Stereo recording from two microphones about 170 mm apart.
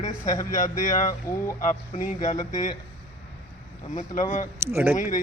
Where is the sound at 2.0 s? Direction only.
50° left (ahead or behind).